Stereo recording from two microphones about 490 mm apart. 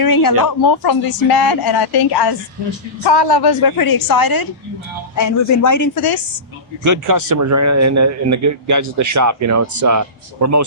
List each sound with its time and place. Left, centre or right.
0.0 s a woman's voice: left
6.8 s a man's voice: right